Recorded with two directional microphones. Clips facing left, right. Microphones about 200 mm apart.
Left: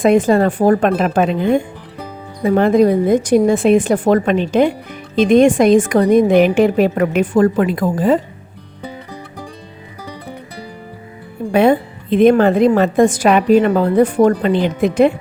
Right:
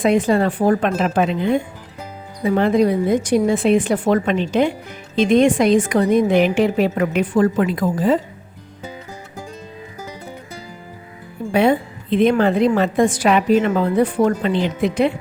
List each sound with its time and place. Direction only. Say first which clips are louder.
0.0 s a woman's voice: left 4 dB; 45° left (ahead or behind)
11.5 s a woman's voice: left 4 dB; 50° left (ahead or behind)
13.8 s a woman's voice: left 4 dB; 40° left (ahead or behind)